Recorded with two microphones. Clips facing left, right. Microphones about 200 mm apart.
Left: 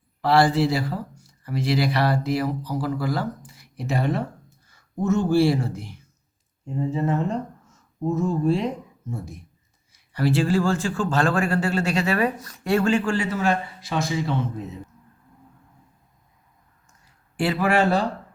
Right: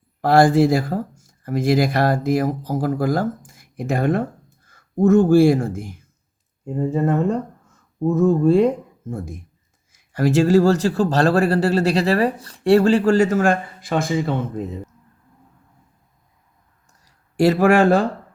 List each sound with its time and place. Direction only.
0.2 s a man's voice: 50° right (ahead or behind)
17.1 s speech: 40° right (ahead or behind)